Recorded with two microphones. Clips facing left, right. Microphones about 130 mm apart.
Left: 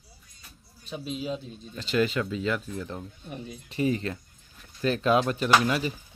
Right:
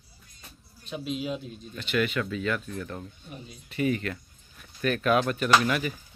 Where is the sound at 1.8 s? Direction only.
30° left (ahead or behind).